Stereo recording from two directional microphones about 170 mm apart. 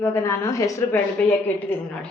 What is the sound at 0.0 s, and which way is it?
A woman's voice, 15° left (ahead or behind).